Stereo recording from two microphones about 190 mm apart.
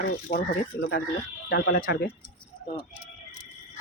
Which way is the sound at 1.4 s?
60° left (ahead or behind).